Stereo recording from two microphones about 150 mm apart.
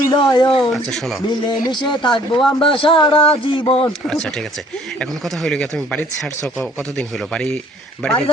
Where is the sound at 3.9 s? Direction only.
5° left (ahead or behind).